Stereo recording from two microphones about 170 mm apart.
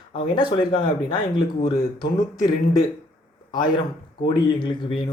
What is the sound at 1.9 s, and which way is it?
Speech, 25° left (ahead or behind).